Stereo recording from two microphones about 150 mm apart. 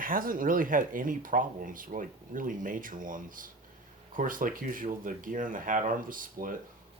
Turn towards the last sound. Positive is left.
turn(degrees=-65)  # may be behind; listen again after turning